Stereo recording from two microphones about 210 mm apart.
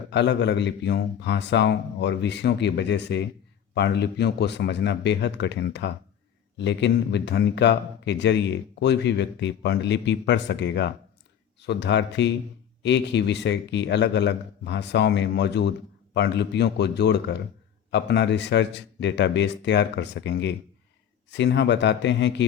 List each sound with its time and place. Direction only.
0.1 s a man's voice: 55° left (ahead or behind)